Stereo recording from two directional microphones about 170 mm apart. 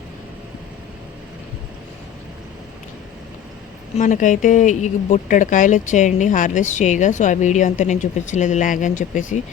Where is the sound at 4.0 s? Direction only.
50° left (ahead or behind).